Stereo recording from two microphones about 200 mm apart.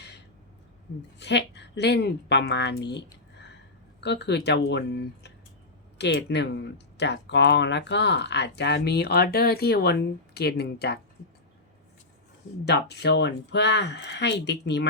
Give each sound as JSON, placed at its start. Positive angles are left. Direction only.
{"t": 1.2, "sound": "speech", "side_deg": 60}
{"t": 4.0, "sound": "speech", "side_deg": 60}
{"t": 12.6, "sound": "speech", "side_deg": 55}